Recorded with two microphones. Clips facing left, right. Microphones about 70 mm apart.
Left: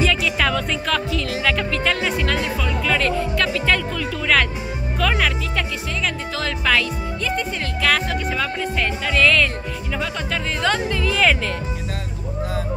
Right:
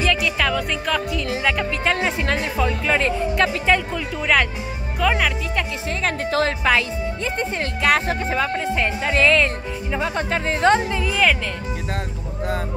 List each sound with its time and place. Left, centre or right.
0.0 s music: centre
1.3 s speech: centre
6.0 s music: right
6.6 s speech: right